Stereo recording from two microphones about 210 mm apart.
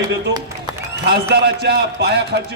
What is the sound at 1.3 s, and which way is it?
Speech, 55° right (ahead or behind).